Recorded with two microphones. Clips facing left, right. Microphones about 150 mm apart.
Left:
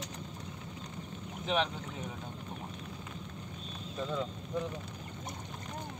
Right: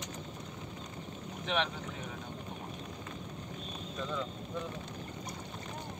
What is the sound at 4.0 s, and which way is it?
Speech, 20° left (ahead or behind).